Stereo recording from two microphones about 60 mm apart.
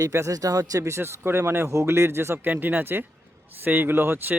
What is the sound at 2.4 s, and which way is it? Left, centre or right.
Speech, right.